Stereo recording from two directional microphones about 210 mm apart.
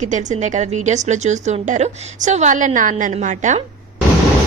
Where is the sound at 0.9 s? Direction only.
35° right (ahead or behind).